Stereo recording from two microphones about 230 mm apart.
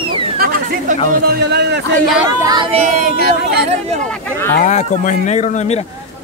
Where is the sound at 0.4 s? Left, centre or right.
Right.